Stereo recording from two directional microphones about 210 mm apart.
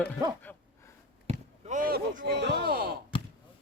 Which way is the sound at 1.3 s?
35° right (ahead or behind).